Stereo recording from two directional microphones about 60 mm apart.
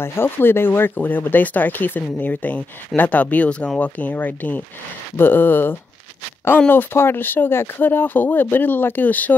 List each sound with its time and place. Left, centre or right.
0.0 s speech: left